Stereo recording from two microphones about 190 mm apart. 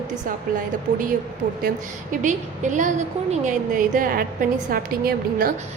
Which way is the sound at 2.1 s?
40° right (ahead or behind).